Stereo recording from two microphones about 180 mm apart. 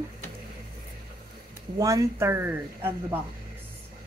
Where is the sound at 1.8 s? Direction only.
20° right (ahead or behind).